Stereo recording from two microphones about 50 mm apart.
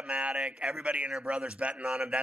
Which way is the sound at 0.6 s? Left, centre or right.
Centre.